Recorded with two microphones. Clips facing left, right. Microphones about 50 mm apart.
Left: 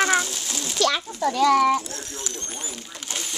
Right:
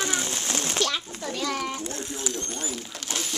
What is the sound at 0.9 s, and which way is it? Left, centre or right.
Speech, left.